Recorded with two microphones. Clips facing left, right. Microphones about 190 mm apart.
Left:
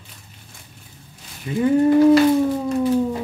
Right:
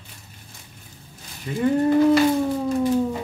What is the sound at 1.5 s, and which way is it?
Speech, 20° left (ahead or behind).